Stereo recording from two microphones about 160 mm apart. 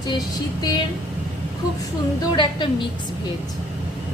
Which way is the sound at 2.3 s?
30° left (ahead or behind).